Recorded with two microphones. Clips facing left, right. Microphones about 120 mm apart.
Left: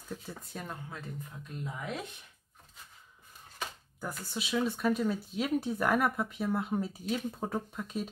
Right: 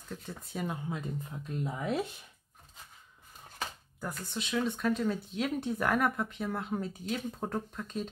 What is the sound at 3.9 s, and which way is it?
Speech, centre (ahead or behind).